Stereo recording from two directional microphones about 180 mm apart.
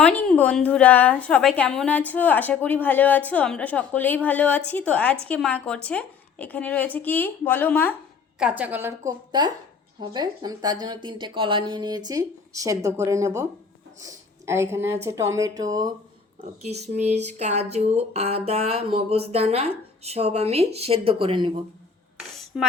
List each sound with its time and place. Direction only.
0.0 s a woman's voice: 10° left (ahead or behind)
8.4 s a woman's voice: 5° right (ahead or behind)
16.4 s speech: 35° right (ahead or behind)
22.5 s speech: 5° right (ahead or behind)